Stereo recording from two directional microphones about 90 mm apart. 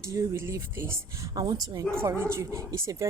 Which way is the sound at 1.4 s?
45° right (ahead or behind).